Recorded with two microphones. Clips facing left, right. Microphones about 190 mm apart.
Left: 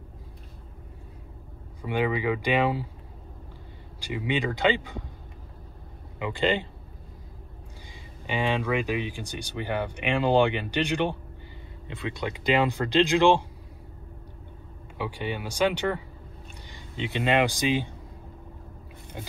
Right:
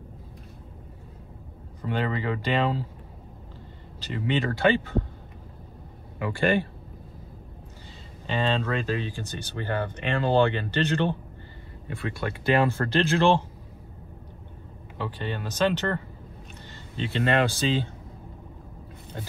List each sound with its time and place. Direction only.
1.8 s speech: 10° left (ahead or behind)
4.0 s speech: 15° left (ahead or behind)
6.1 s speech: 20° left (ahead or behind)
8.3 s speech: 15° left (ahead or behind)
15.0 s speech: 10° left (ahead or behind)